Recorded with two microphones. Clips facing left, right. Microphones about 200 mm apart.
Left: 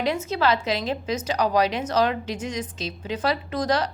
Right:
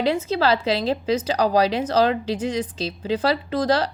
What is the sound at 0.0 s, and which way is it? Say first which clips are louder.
Speech: right 3 dB; 30° right (ahead or behind).